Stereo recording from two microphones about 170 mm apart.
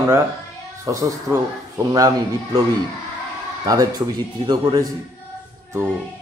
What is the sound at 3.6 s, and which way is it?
Speech, 20° right (ahead or behind).